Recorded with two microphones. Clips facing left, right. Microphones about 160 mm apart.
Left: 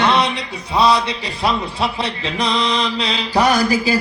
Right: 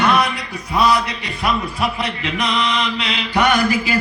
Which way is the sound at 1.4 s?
30° left (ahead or behind).